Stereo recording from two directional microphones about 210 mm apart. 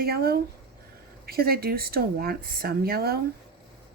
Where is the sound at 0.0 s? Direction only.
45° right (ahead or behind).